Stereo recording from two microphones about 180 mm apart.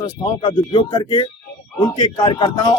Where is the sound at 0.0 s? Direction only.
25° left (ahead or behind).